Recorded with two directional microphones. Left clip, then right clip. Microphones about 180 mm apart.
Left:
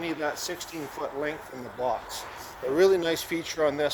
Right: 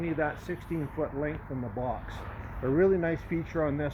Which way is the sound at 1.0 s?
90° left.